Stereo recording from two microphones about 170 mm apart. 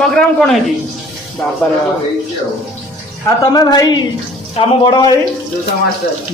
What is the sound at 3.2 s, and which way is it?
A man's voice, 20° left (ahead or behind).